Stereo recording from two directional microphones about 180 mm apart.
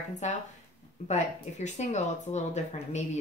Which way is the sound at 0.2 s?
40° left (ahead or behind).